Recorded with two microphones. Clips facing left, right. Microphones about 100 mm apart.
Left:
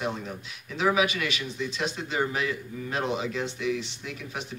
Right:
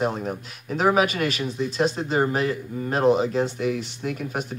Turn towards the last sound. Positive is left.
turn(degrees=-45)  # may be behind; listen again after turning